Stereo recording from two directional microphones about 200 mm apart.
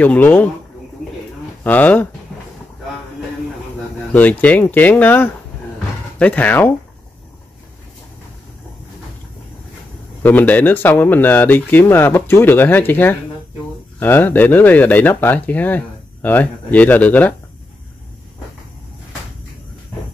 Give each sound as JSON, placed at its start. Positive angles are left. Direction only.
{"t": 0.0, "sound": "speech", "side_deg": 10}
{"t": 1.6, "sound": "speech", "side_deg": 10}
{"t": 4.1, "sound": "speech", "side_deg": 10}
{"t": 10.2, "sound": "speech", "side_deg": 10}